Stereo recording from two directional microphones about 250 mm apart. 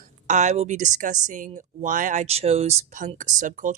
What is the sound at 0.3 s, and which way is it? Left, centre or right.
A woman's voice, right.